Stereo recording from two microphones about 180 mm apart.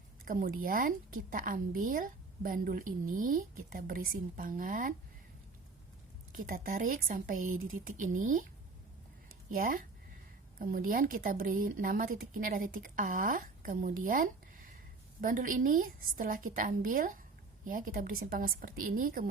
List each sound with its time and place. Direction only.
0.3 s a woman's voice: 50° right (ahead or behind)
6.3 s a woman's voice: 50° right (ahead or behind)
9.6 s a woman's voice: 50° right (ahead or behind)